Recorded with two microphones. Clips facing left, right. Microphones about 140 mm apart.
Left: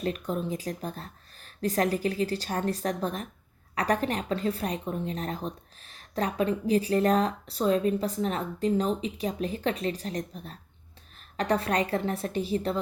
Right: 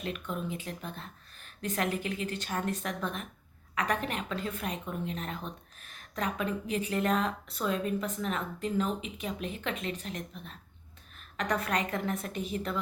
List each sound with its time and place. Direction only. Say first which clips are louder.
0.0 s speech: left 6 dB; 40° left (ahead or behind)